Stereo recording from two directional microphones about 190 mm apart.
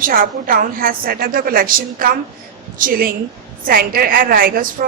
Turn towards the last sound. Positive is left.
turn(degrees=-50)  # may be behind; listen again after turning